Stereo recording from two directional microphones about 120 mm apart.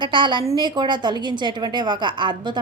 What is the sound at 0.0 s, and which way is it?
Speech, 40° right (ahead or behind).